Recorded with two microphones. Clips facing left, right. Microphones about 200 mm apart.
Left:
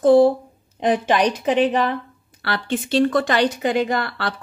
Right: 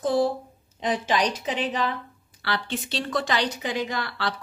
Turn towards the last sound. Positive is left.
turn(degrees=55)  # may be behind; listen again after turning